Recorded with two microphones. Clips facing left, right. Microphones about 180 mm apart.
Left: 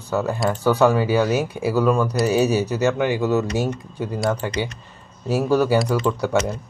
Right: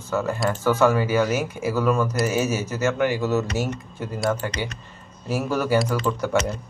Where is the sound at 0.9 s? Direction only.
15° left (ahead or behind).